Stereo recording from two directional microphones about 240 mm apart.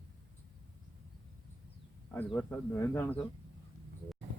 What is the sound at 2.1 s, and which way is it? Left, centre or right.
Speech, centre.